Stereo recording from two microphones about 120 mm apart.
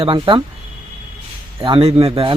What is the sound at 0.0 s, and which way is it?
Speech, 45° right (ahead or behind).